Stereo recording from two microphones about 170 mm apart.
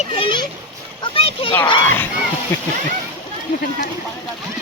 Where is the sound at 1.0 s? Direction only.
30° left (ahead or behind).